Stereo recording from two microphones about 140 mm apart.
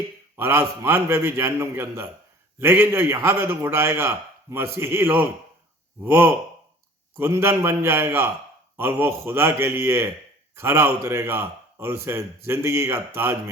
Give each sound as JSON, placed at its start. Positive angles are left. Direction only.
{"t": 0.3, "sound": "a man's voice", "side_deg": -15}